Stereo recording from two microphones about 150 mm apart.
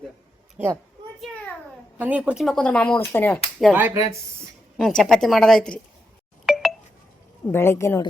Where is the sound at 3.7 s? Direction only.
15° right (ahead or behind).